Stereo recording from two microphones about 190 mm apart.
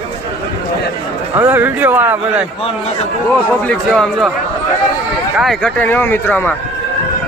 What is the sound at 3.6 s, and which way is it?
Speech, 5° left (ahead or behind).